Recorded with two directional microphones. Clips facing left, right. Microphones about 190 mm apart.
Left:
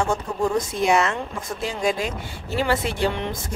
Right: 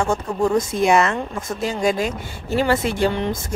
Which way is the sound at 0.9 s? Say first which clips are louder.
Right 2 dB; 50° right (ahead or behind).